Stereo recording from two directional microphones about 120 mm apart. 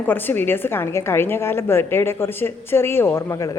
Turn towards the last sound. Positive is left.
turn(degrees=20)  # may be behind; listen again after turning